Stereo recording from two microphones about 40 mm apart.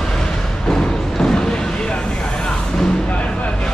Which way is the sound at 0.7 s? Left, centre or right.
Centre.